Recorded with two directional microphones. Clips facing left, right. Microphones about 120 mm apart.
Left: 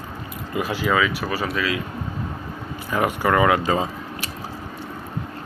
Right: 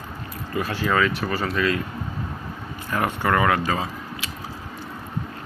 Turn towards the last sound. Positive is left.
turn(degrees=20)  # may be behind; listen again after turning